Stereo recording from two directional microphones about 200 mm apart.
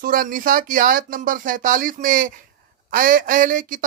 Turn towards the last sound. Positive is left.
turn(degrees=-40)  # may be behind; listen again after turning